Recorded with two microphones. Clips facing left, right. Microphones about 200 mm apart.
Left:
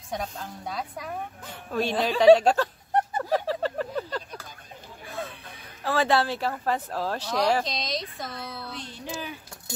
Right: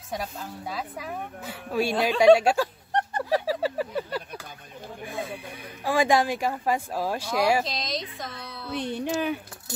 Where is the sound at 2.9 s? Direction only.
5° left (ahead or behind).